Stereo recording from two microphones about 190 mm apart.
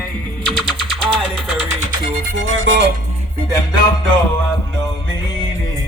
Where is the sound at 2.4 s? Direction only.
85° right.